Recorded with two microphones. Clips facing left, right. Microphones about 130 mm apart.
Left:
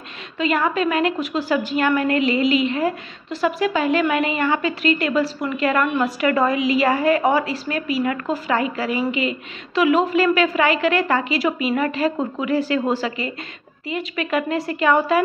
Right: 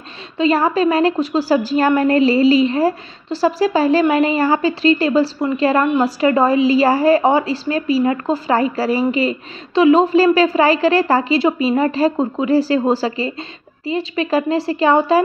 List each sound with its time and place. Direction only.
0.4 s a woman's voice: 35° right (ahead or behind)